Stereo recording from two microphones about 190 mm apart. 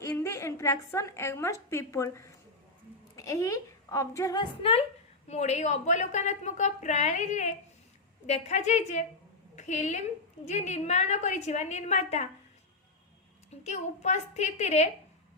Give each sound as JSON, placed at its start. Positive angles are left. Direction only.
{"t": 0.0, "sound": "a woman's voice", "side_deg": 15}
{"t": 4.6, "sound": "a woman's voice", "side_deg": 30}
{"t": 13.5, "sound": "a woman's voice", "side_deg": 35}